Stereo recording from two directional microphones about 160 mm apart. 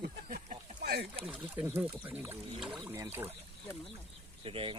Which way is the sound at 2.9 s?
15° right (ahead or behind).